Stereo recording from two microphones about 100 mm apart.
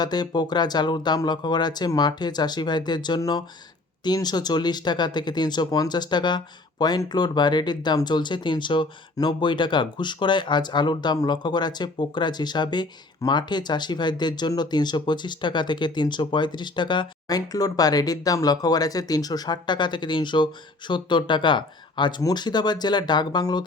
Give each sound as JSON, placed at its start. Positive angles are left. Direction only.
{"t": 0.0, "sound": "speech", "side_deg": 45}